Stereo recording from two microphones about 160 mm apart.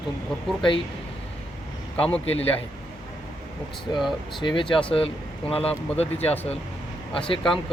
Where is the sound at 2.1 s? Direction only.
35° left (ahead or behind).